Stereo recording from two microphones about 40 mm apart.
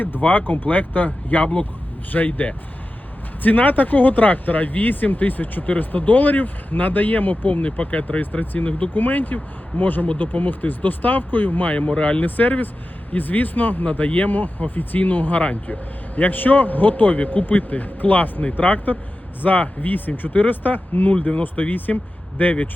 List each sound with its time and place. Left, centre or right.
0.2 s speech: left
11.9 s speech: left
12.2 s speech: left
16.1 s speech: left
21.2 s speech: left